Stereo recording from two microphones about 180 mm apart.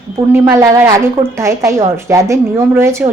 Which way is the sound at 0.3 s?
15° right (ahead or behind).